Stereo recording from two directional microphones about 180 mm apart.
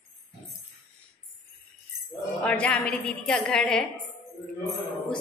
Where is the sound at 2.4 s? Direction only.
5° left (ahead or behind).